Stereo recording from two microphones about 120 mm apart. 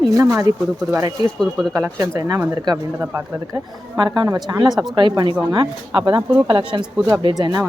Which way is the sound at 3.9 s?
40° right (ahead or behind).